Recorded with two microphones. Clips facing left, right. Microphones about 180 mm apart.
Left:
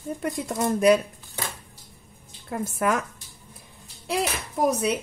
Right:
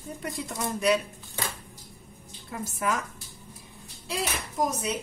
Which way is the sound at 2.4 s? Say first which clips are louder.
Left 5 dB; 55° left (ahead or behind).